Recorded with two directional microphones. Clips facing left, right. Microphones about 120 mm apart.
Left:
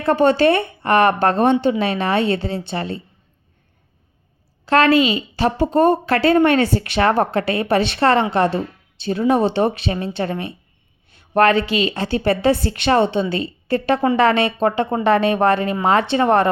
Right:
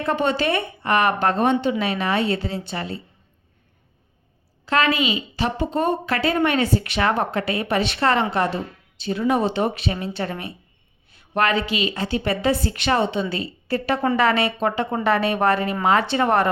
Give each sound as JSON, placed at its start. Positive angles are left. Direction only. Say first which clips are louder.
{"t": 0.0, "sound": "a woman's voice", "louder": "left 7 dB", "side_deg": 35}
{"t": 4.6, "sound": "a woman's voice", "louder": "left 6 dB", "side_deg": 30}